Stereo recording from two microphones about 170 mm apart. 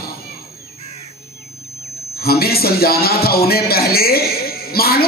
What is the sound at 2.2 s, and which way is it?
A man's voice, 65° left (ahead or behind).